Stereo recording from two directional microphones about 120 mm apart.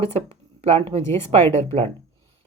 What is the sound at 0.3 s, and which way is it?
Speech, 50° right (ahead or behind).